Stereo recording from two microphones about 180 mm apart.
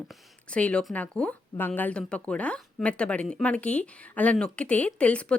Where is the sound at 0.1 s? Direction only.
5° left (ahead or behind).